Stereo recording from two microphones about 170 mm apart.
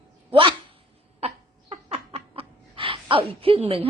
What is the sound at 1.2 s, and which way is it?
Laughter, 40° right (ahead or behind).